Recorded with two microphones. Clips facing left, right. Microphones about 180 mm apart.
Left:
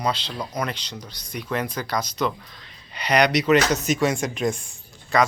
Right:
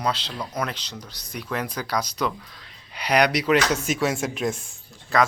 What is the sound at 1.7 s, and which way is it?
Speech, 10° right (ahead or behind).